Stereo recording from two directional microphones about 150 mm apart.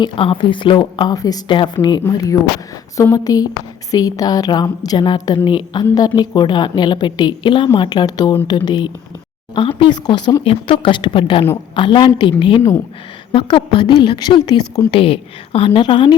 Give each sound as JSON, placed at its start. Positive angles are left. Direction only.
{"t": 0.0, "sound": "a woman's voice", "side_deg": 35}
{"t": 13.7, "sound": "a woman's voice", "side_deg": 30}